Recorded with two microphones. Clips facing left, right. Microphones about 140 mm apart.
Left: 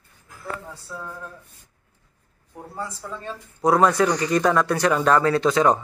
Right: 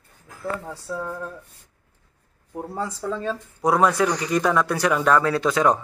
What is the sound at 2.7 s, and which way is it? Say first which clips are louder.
Speech: right 5 dB; 90° right.